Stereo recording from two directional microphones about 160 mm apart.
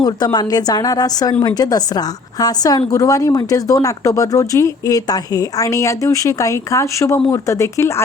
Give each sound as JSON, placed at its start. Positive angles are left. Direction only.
{"t": 0.0, "sound": "a woman's voice", "side_deg": 25}